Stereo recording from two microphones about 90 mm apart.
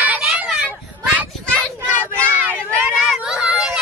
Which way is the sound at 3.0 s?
10° right (ahead or behind).